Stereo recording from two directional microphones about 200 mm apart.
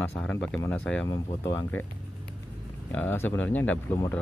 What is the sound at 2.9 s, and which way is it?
Speech, 10° left (ahead or behind).